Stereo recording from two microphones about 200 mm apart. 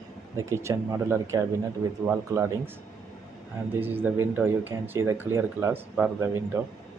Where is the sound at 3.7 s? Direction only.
10° right (ahead or behind).